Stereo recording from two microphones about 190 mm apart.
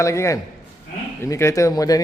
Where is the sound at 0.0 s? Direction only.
15° left (ahead or behind).